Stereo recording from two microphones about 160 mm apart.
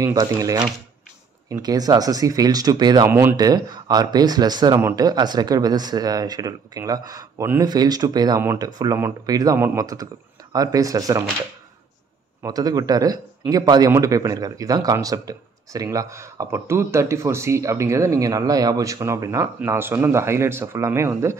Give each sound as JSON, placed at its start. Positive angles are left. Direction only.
{"t": 0.0, "sound": "a man's voice", "side_deg": -20}
{"t": 3.1, "sound": "speech", "side_deg": -15}
{"t": 3.3, "sound": "a man's voice", "side_deg": -25}
{"t": 12.4, "sound": "a man's voice", "side_deg": -25}